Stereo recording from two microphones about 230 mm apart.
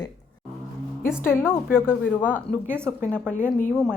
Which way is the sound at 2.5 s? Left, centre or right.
Left.